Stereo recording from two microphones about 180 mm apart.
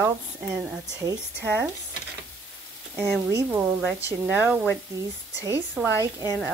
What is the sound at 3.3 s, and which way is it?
A woman's voice, 15° right (ahead or behind).